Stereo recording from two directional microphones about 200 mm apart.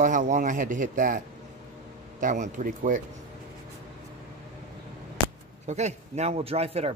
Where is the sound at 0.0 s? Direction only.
40° right (ahead or behind).